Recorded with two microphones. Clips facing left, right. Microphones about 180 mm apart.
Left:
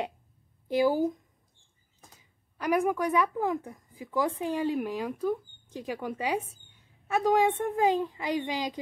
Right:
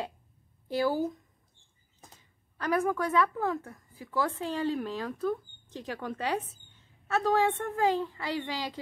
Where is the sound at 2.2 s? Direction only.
15° left (ahead or behind).